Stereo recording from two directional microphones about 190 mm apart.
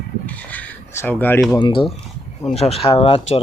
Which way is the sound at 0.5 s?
10° left (ahead or behind).